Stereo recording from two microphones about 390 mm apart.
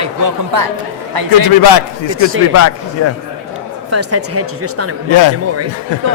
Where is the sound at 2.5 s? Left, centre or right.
Left.